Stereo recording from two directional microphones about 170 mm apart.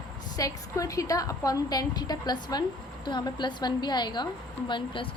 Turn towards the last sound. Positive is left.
turn(degrees=30)  # may be behind; listen again after turning